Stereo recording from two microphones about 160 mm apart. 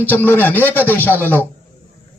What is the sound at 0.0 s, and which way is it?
A man's voice, 10° left (ahead or behind).